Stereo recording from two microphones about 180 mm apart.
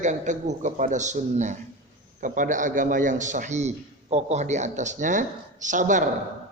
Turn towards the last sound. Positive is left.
turn(degrees=-45)  # may be behind; listen again after turning